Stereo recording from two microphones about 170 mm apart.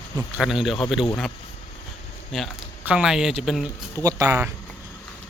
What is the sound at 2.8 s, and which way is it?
Speech, 5° right (ahead or behind).